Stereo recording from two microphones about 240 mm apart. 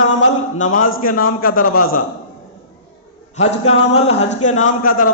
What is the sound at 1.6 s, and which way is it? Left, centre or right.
Speech, left.